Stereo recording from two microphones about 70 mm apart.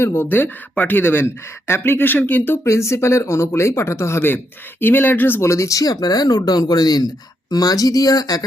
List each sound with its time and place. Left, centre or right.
0.0 s speech: left
5.5 s speech: left
7.5 s speech: left